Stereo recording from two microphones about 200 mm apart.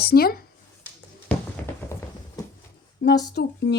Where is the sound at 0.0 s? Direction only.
50° left (ahead or behind).